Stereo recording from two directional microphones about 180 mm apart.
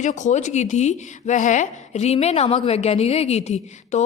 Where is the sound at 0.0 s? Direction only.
40° left (ahead or behind).